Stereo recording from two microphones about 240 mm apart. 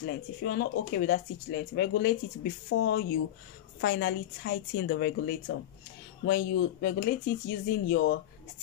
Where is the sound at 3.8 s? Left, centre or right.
Left.